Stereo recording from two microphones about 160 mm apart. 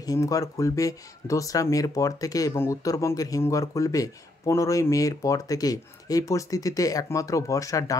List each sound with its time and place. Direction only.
0.0 s speech: 20° left (ahead or behind)